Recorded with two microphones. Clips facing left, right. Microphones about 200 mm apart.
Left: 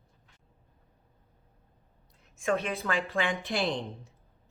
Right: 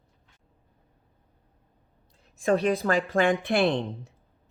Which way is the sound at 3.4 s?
60° right (ahead or behind).